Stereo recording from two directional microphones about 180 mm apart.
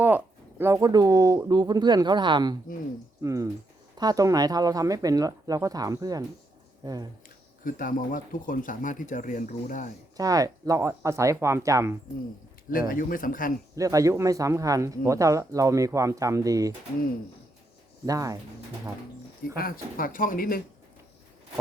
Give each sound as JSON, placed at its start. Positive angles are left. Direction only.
{"t": 0.6, "sound": "speech", "side_deg": -20}
{"t": 7.6, "sound": "speech", "side_deg": 50}
{"t": 10.2, "sound": "speech", "side_deg": -20}
{"t": 12.7, "sound": "speech", "side_deg": 50}
{"t": 13.7, "sound": "speech", "side_deg": -20}
{"t": 18.0, "sound": "speech", "side_deg": -20}
{"t": 19.5, "sound": "speech", "side_deg": 55}